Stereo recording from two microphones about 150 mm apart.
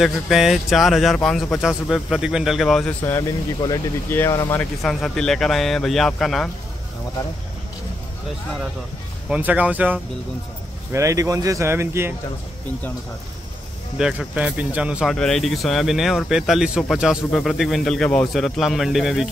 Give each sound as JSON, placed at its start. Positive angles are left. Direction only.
{"t": 0.0, "sound": "speech", "side_deg": 0}
{"t": 4.8, "sound": "speech", "side_deg": 5}
{"t": 9.3, "sound": "speech", "side_deg": -10}
{"t": 13.9, "sound": "speech", "side_deg": -5}